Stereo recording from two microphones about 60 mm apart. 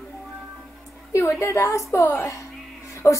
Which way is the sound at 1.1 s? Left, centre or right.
Left.